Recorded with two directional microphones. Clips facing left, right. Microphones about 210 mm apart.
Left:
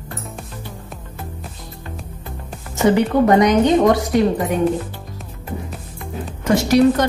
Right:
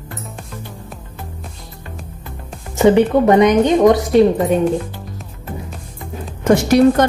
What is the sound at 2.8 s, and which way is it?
Speech, 20° right (ahead or behind).